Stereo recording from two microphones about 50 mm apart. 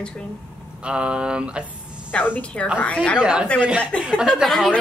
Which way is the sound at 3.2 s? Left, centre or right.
Centre.